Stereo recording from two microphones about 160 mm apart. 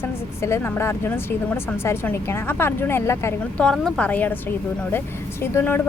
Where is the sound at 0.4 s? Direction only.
15° left (ahead or behind).